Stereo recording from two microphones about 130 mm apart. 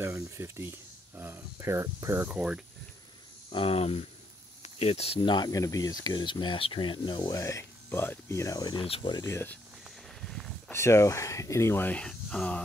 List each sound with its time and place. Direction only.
0.0 s speech: 20° right (ahead or behind)
3.5 s speech: 50° left (ahead or behind)
7.3 s speech: 25° left (ahead or behind)
8.8 s speech: 45° left (ahead or behind)
9.2 s speech: 20° left (ahead or behind)
10.7 s speech: 20° left (ahead or behind)